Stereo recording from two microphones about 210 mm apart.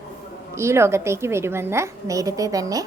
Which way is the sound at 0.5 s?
15° right (ahead or behind).